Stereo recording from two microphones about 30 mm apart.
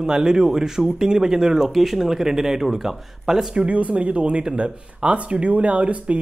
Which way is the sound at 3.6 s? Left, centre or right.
Right.